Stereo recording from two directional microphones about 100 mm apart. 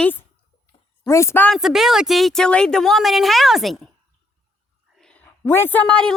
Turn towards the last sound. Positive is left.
turn(degrees=10)  # may be behind; listen again after turning